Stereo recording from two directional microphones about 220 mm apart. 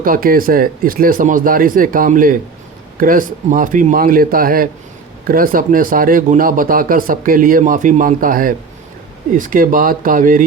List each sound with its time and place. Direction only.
0.0 s speech: 40° right (ahead or behind)